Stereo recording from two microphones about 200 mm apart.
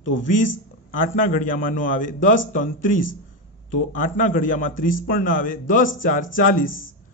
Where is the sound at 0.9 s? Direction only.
45° left (ahead or behind).